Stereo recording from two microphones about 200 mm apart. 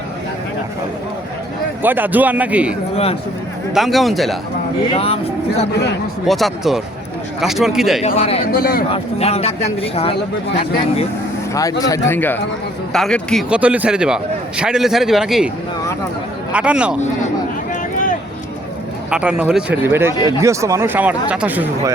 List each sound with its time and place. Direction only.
1.8 s speech: 10° right (ahead or behind)
2.9 s speech: 30° left (ahead or behind)
3.8 s a man's voice: centre (ahead or behind)
4.9 s speech: 30° left (ahead or behind)
6.2 s a man's voice: centre (ahead or behind)
8.0 s speech: 30° left (ahead or behind)
8.5 s speech: 50° left (ahead or behind)
8.9 s a man's voice: 30° left (ahead or behind)
11.5 s a man's voice: 15° left (ahead or behind); by 15.4 s centre (ahead or behind)
16.5 s a man's voice: 5° right (ahead or behind)
19.1 s speech: 5° right (ahead or behind)